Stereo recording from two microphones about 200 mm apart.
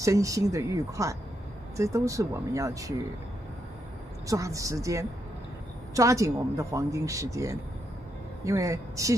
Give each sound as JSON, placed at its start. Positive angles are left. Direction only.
{"t": 0.0, "sound": "speech", "side_deg": -15}
{"t": 4.3, "sound": "speech", "side_deg": -15}